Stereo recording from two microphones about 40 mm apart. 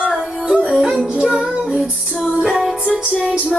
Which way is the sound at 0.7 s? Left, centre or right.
Centre.